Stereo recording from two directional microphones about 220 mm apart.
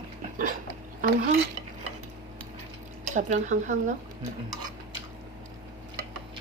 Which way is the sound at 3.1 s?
35° right (ahead or behind).